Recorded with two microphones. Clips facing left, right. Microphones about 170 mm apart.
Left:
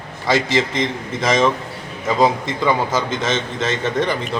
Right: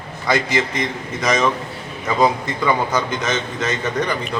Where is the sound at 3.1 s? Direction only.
25° left (ahead or behind).